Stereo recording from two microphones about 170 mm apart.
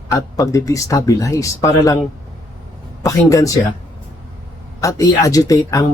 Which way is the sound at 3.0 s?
20° left (ahead or behind).